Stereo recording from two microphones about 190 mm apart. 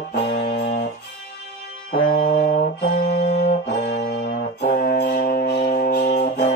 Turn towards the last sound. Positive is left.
turn(degrees=45)  # may be behind; listen again after turning